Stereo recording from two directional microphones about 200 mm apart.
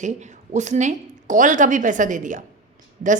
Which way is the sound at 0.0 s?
35° right (ahead or behind).